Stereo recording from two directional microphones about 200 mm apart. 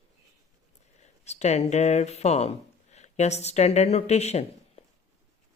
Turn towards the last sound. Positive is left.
turn(degrees=35)  # may be behind; listen again after turning